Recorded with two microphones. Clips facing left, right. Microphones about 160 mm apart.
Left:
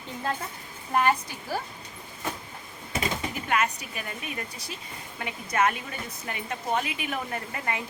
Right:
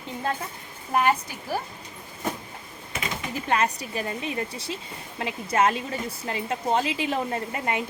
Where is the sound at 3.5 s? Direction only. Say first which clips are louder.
Right 3 dB; 30° right (ahead or behind).